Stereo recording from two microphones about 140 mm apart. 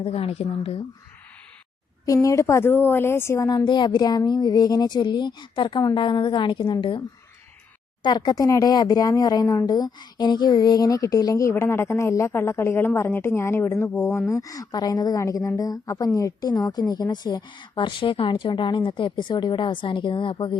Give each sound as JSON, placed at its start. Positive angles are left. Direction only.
{"t": 0.0, "sound": "speech", "side_deg": 45}
{"t": 2.0, "sound": "speech", "side_deg": 25}
{"t": 8.0, "sound": "a woman's voice", "side_deg": 30}